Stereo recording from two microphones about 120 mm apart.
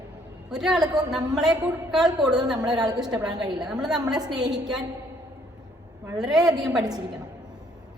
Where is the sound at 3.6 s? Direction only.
5° right (ahead or behind).